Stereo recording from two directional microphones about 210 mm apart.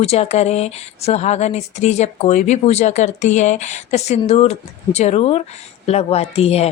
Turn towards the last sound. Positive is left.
turn(degrees=30)  # may be behind; listen again after turning